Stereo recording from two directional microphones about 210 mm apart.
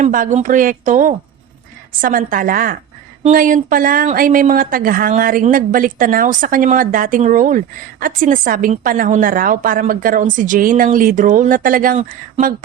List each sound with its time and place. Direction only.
0.0 s speech: 40° right (ahead or behind)